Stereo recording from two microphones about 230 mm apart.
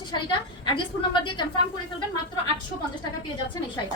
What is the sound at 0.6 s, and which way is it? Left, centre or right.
Speech, left.